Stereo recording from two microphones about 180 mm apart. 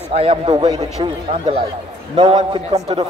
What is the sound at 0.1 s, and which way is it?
Speech, 35° right (ahead or behind).